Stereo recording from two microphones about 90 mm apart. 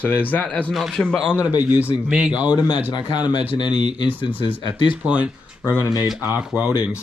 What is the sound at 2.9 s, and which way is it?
Speech, 55° left (ahead or behind).